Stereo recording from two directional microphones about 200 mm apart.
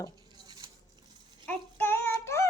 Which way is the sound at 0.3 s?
20° right (ahead or behind).